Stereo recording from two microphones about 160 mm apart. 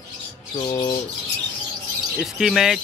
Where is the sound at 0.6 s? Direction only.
35° left (ahead or behind).